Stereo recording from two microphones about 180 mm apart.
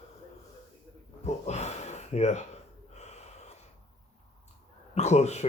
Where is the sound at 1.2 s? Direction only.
40° left (ahead or behind).